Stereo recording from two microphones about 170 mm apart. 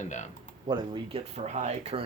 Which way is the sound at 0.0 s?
45° left (ahead or behind).